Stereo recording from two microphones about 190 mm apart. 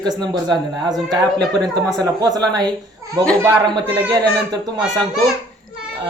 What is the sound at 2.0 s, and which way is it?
A man's voice, 20° right (ahead or behind).